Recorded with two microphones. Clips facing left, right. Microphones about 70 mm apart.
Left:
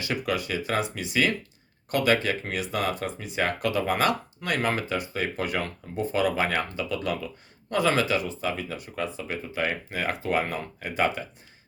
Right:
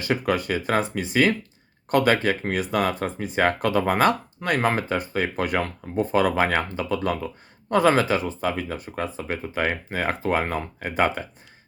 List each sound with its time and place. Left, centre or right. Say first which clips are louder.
0.0 s speech: right 5 dB; right